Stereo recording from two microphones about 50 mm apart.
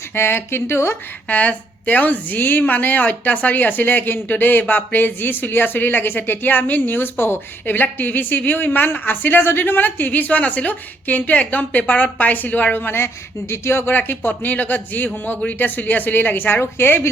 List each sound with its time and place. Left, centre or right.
0.1 s speech: left
1.3 s a woman's voice: left
12.7 s speech: left
13.9 s a woman's voice: left